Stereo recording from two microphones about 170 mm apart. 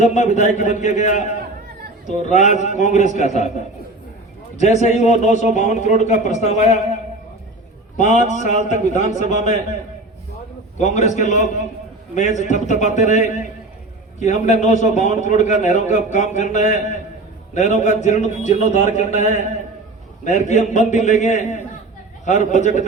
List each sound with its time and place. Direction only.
0.0 s a man's voice: 45° left (ahead or behind)
4.5 s a man's voice: 40° left (ahead or behind)
7.9 s a man's voice: 45° left (ahead or behind)
10.8 s a man's voice: 45° left (ahead or behind)